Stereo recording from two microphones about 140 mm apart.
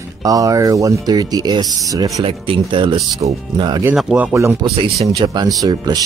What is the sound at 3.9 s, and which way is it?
Speech, 5° right (ahead or behind).